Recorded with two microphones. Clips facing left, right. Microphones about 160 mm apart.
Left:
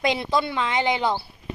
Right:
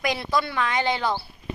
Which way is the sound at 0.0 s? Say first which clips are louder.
Left 2 dB; 25° left (ahead or behind).